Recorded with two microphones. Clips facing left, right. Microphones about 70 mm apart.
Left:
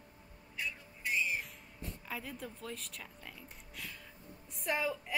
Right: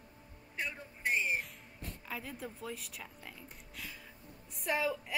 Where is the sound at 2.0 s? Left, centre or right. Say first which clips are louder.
Right 1 dB; centre.